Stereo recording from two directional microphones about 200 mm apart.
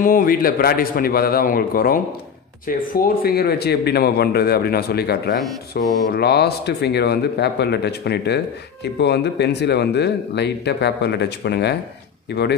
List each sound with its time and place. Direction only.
0.0 s speech: 45° left (ahead or behind)